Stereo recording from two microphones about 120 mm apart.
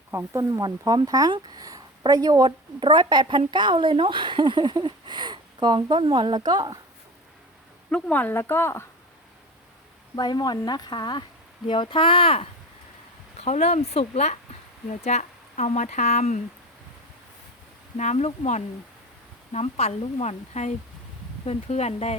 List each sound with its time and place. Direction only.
0.1 s speech: 25° right (ahead or behind)
7.9 s speech: 5° left (ahead or behind)
10.2 s speech: 35° left (ahead or behind)
13.4 s speech: 65° left (ahead or behind)
17.9 s a woman's voice: 75° left (ahead or behind)
19.5 s a woman's voice: 65° left (ahead or behind)